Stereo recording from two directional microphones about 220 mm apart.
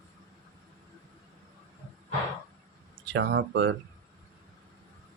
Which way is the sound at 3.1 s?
50° right (ahead or behind).